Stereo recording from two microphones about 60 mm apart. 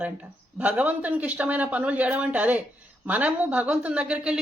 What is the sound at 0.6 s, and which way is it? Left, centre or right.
Speech, right.